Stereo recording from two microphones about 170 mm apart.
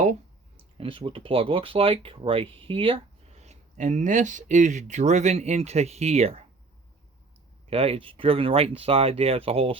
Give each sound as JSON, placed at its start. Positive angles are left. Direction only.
{"t": 0.8, "sound": "speech", "side_deg": -30}
{"t": 7.7, "sound": "speech", "side_deg": -35}